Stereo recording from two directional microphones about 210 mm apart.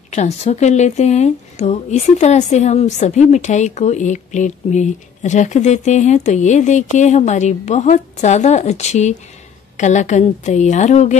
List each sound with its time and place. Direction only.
0.1 s a woman's voice: 30° left (ahead or behind)